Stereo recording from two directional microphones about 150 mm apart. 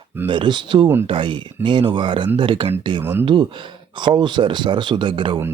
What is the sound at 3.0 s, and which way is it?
Speech, 15° right (ahead or behind).